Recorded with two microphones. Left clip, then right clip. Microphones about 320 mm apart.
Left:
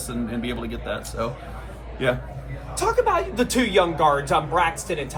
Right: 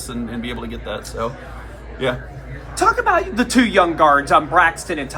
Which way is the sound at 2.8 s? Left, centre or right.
Right.